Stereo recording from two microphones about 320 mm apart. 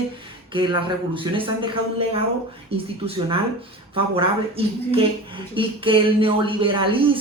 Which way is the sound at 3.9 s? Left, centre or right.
Centre.